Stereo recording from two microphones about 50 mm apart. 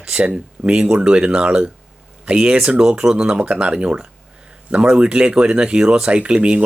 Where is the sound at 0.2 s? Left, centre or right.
Right.